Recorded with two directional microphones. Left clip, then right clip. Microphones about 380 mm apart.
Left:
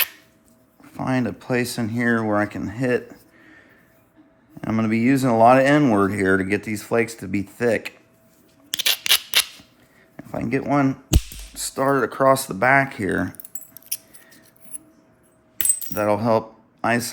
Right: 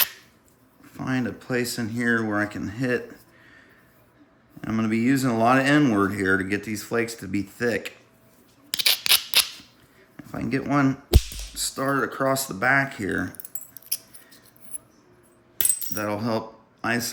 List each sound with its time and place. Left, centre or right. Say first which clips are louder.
0.8 s speech: left 4 dB; centre
8.7 s scissors: left 1 dB; centre
10.2 s speech: left 4 dB; centre
13.9 s scissors: even; centre
15.9 s speech: left 10 dB; centre